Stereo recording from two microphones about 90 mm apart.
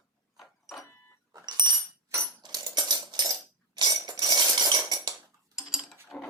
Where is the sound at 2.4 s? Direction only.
50° right (ahead or behind).